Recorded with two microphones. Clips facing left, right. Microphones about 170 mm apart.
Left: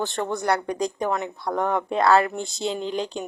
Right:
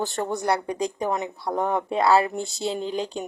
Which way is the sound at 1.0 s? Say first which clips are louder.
Left 1 dB; 15° right (ahead or behind).